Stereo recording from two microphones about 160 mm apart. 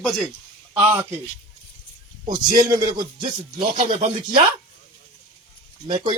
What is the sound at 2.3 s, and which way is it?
A man's voice, 25° right (ahead or behind).